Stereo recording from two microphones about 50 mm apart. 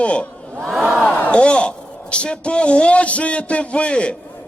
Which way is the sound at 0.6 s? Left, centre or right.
Centre.